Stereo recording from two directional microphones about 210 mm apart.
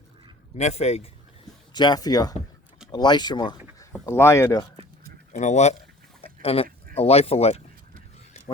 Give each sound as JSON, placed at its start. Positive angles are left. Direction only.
{"t": 0.5, "sound": "speech", "side_deg": 30}
{"t": 1.7, "sound": "speech", "side_deg": 20}
{"t": 5.3, "sound": "speech", "side_deg": 35}
{"t": 6.2, "sound": "a sound", "side_deg": 30}
{"t": 6.9, "sound": "speech", "side_deg": 30}